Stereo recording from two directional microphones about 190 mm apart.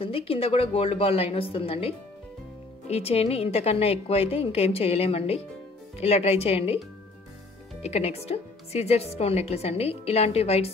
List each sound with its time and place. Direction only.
0.0 s speech: 30° left (ahead or behind)
7.8 s speech: 35° left (ahead or behind)